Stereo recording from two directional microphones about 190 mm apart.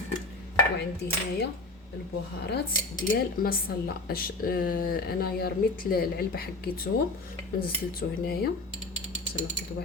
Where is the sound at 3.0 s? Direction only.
50° left (ahead or behind).